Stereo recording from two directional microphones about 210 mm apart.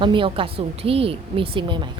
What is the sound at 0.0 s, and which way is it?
Speech, 25° right (ahead or behind).